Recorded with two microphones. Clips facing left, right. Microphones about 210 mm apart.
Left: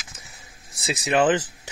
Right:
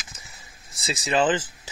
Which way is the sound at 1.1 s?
65° left (ahead or behind).